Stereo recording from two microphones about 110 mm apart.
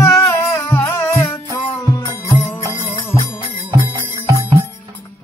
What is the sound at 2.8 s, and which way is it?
Music, 50° left (ahead or behind).